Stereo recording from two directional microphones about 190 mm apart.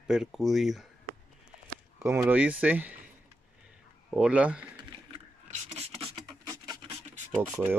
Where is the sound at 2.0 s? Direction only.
15° right (ahead or behind).